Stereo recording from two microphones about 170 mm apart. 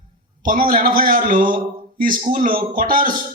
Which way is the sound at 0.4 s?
55° right (ahead or behind).